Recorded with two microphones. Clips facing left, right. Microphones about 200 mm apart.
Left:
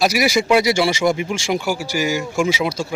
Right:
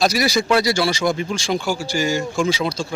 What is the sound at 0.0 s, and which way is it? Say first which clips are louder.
Speech: left 1 dB; 10° left (ahead or behind).